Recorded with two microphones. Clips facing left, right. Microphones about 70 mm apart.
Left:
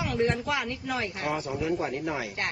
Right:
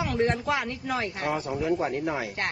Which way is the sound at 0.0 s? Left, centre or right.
Right.